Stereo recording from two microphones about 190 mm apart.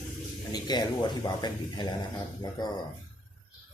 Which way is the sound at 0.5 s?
20° left (ahead or behind).